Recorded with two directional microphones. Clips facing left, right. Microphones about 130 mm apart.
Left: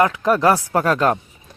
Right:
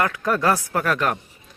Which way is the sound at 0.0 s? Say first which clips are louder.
Left 5 dB; 20° left (ahead or behind).